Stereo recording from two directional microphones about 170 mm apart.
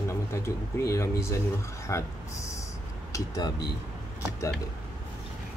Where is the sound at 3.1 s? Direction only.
20° left (ahead or behind).